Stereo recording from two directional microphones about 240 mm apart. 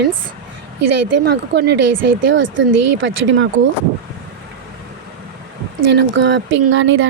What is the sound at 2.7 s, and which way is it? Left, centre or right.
Speech, right.